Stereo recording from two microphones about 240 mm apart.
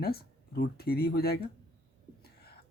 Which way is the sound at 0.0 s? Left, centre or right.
Left.